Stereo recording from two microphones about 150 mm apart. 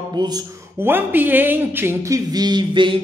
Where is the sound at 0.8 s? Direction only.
15° right (ahead or behind).